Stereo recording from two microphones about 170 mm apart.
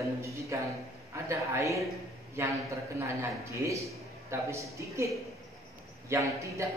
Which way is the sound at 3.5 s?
20° right (ahead or behind).